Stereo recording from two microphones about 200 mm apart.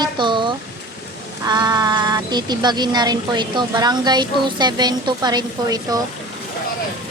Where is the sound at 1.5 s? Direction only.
20° right (ahead or behind).